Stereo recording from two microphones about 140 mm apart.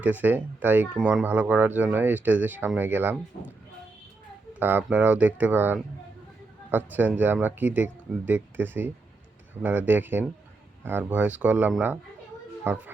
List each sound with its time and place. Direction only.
0.0 s speech: 10° right (ahead or behind)
4.6 s speech: 10° right (ahead or behind)